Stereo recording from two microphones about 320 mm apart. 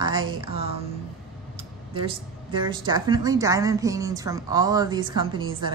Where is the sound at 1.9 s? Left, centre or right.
Centre.